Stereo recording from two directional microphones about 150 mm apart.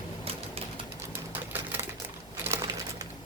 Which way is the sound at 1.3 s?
15° right (ahead or behind).